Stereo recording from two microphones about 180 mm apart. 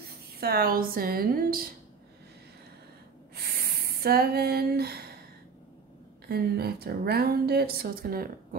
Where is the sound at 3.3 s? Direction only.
60° right (ahead or behind).